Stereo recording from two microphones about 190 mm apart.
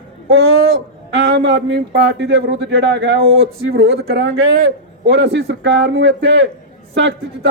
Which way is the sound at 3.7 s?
60° right (ahead or behind).